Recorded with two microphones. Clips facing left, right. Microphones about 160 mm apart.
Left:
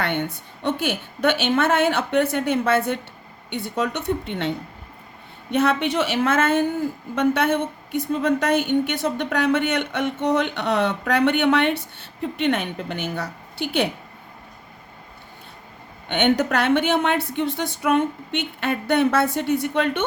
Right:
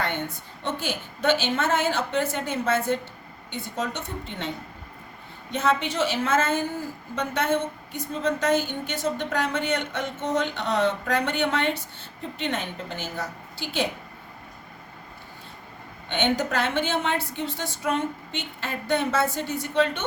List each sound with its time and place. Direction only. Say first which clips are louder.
0.0 s a woman's voice: left 4 dB; 60° left (ahead or behind)
16.0 s a woman's voice: left 5 dB; 60° left (ahead or behind)